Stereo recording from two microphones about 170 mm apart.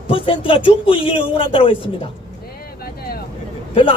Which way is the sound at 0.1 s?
30° left (ahead or behind).